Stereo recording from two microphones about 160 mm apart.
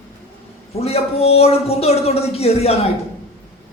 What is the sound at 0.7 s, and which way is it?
A woman's voice, 40° left (ahead or behind).